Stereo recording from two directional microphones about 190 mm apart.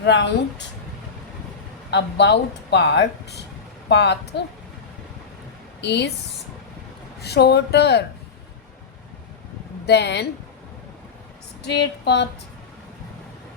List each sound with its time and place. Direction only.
0.0 s speech: 65° left (ahead or behind)
1.9 s speech: 65° left (ahead or behind)
5.8 s speech: 65° left (ahead or behind)
7.2 s speech: 60° left (ahead or behind)
9.8 s speech: 60° left (ahead or behind)
11.6 s speech: 65° left (ahead or behind)